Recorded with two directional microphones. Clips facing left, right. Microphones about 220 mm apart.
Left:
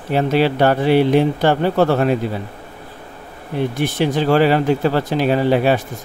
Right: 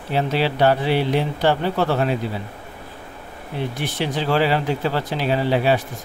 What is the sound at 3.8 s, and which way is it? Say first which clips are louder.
Speech: left 7 dB; 50° left (ahead or behind).